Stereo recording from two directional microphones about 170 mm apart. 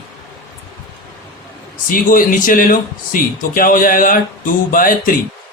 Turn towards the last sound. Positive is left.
turn(degrees=55)  # may be behind; listen again after turning